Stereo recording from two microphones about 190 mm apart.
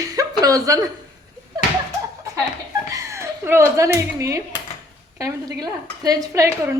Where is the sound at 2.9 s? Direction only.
15° right (ahead or behind).